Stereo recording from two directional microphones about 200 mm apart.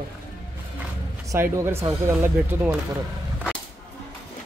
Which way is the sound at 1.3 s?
15° right (ahead or behind).